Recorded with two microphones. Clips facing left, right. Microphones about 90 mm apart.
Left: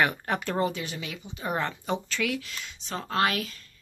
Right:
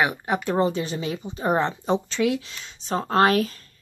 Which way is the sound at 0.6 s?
30° right (ahead or behind).